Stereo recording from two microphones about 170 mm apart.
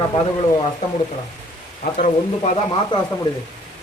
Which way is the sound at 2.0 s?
45° left (ahead or behind).